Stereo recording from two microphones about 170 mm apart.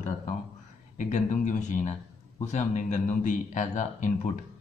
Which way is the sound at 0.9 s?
45° left (ahead or behind).